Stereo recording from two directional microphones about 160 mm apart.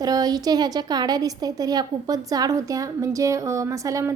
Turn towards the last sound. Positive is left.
turn(degrees=-20)  # may be behind; listen again after turning